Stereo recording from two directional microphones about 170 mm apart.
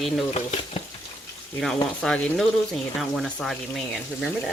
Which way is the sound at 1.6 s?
Centre (ahead or behind).